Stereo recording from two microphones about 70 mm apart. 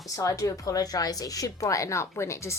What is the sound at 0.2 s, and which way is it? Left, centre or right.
Speech, left.